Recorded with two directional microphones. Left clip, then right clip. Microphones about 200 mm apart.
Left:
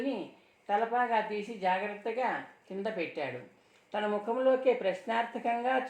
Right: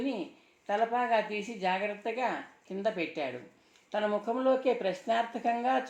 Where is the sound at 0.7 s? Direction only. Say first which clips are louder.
Even; 40° right (ahead or behind).